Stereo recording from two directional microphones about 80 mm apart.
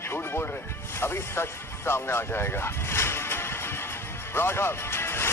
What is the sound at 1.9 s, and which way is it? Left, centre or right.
Music, left.